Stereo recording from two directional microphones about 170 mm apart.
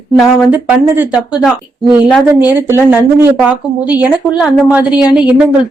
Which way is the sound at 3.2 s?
10° right (ahead or behind).